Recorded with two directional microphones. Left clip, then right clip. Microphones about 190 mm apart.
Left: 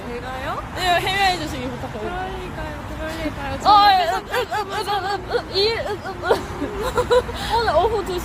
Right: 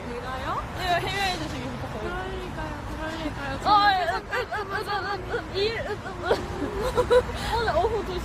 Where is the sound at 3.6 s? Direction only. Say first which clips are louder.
Left 7 dB; 40° left (ahead or behind).